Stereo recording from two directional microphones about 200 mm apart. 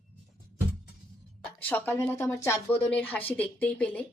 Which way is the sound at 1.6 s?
10° left (ahead or behind).